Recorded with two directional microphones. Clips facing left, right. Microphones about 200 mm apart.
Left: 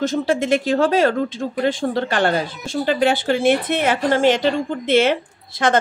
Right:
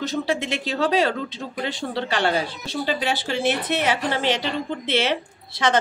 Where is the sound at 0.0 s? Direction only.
50° left (ahead or behind).